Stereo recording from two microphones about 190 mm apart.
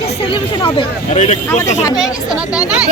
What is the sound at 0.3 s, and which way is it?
Speech, 25° left (ahead or behind).